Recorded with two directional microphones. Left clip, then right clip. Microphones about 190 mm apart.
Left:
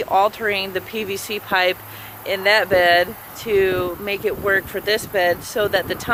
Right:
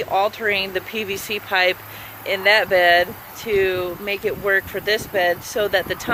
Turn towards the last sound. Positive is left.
turn(degrees=0)  # may be behind; listen again after turning